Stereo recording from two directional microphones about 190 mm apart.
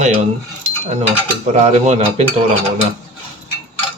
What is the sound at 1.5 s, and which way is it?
Speech, 35° right (ahead or behind).